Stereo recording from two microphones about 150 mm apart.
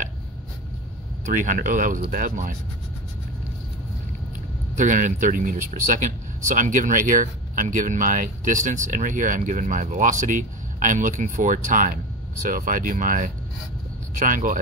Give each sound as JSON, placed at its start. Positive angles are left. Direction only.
{"t": 1.2, "sound": "speech", "side_deg": -60}
{"t": 4.7, "sound": "speech", "side_deg": -55}